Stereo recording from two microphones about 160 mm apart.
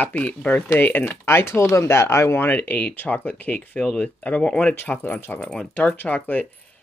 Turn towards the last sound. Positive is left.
turn(degrees=10)  # may be behind; listen again after turning